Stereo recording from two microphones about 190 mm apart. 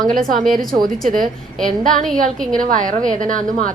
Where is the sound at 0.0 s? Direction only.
45° right (ahead or behind).